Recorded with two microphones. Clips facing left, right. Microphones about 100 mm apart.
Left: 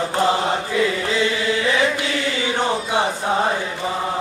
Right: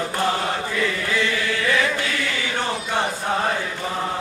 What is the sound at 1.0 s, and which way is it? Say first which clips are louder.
Chant: left 3 dB; 20° left (ahead or behind).